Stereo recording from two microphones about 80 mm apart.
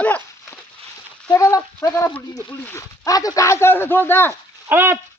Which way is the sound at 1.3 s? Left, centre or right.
Left.